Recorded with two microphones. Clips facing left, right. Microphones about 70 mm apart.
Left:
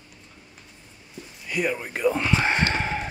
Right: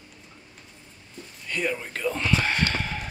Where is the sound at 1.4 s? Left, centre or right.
Centre.